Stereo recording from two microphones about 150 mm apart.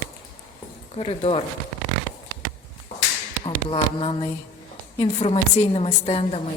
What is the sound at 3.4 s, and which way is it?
A woman's voice, 35° left (ahead or behind).